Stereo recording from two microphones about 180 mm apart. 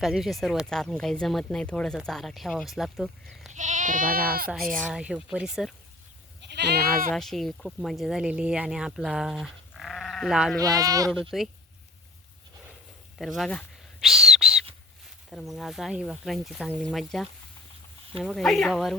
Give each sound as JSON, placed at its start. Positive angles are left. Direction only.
{"t": 0.0, "sound": "speech", "side_deg": 0}
{"t": 3.5, "sound": "speech", "side_deg": -45}
{"t": 4.4, "sound": "speech", "side_deg": 0}
{"t": 6.5, "sound": "goat", "side_deg": -65}
{"t": 7.1, "sound": "speech", "side_deg": 0}
{"t": 10.6, "sound": "speech", "side_deg": -20}
{"t": 11.1, "sound": "speech", "side_deg": 0}
{"t": 13.1, "sound": "owl", "side_deg": 0}
{"t": 15.3, "sound": "speech", "side_deg": 0}